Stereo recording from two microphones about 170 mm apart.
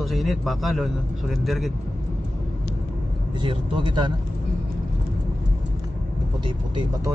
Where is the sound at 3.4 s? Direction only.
30° right (ahead or behind).